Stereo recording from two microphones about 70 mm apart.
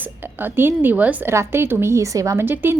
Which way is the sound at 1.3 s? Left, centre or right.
Right.